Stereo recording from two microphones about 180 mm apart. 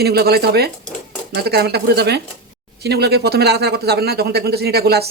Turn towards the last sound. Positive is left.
turn(degrees=-60)  # may be behind; listen again after turning